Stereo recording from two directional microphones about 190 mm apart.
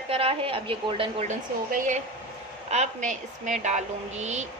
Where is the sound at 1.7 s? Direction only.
40° right (ahead or behind).